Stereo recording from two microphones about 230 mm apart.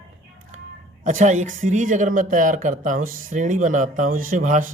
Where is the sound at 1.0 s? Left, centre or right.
Right.